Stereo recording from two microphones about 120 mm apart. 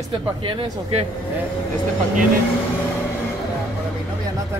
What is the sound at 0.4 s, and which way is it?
Speech, 45° right (ahead or behind).